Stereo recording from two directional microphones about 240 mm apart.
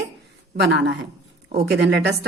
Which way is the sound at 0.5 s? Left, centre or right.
Right.